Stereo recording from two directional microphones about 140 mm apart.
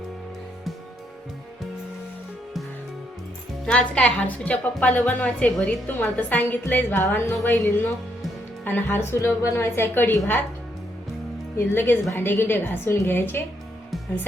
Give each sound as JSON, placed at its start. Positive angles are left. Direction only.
{"t": 3.7, "sound": "a woman's voice", "side_deg": 10}
{"t": 11.5, "sound": "a woman's voice", "side_deg": 15}